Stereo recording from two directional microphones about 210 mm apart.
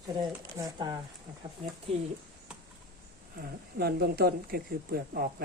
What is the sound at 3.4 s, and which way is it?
Speech, 50° right (ahead or behind).